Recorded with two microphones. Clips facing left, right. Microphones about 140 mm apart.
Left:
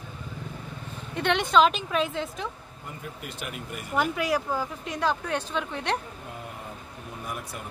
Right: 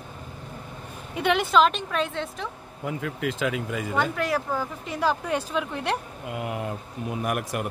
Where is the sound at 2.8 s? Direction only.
90° right.